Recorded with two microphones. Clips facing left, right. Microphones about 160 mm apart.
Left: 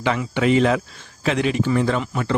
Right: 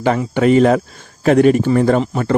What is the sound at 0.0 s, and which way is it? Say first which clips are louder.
Speech: right 6 dB; 45° right (ahead or behind).